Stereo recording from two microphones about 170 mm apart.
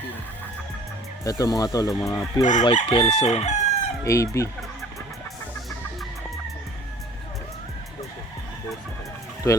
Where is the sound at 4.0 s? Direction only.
20° left (ahead or behind).